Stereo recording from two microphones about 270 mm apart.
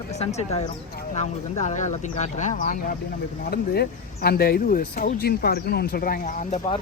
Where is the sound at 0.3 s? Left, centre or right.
Left.